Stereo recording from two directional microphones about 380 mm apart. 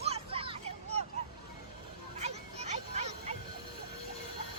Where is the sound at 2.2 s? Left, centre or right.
Centre.